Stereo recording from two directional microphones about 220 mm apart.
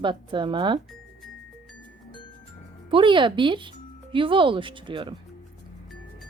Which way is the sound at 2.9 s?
20° right (ahead or behind).